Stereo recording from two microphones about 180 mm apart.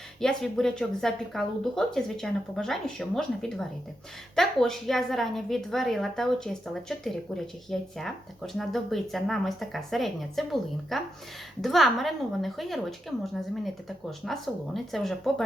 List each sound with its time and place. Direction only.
0.2 s a woman's voice: 5° left (ahead or behind)
14.3 s a woman's voice: centre (ahead or behind)